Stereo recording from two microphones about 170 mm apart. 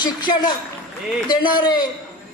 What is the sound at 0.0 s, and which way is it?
A woman's voice, 25° left (ahead or behind).